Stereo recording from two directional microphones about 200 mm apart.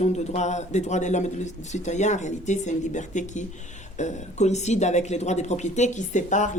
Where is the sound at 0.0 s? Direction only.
35° left (ahead or behind).